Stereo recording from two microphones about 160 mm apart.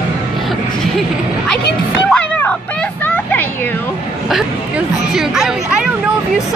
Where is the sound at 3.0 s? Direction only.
10° left (ahead or behind).